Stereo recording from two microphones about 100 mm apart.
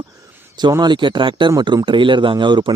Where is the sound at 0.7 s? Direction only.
45° right (ahead or behind).